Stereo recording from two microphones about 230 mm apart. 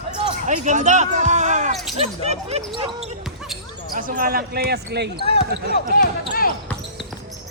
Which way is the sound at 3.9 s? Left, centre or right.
Right.